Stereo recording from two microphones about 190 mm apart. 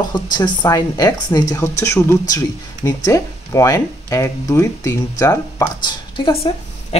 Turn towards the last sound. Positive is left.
turn(degrees=30)  # may be behind; listen again after turning